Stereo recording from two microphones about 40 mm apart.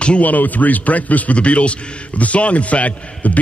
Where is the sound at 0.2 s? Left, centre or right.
Left.